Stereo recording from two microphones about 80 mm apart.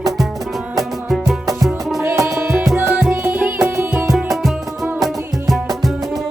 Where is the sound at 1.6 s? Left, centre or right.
Centre.